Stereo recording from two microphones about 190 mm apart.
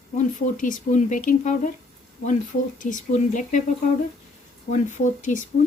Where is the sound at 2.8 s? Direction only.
40° left (ahead or behind).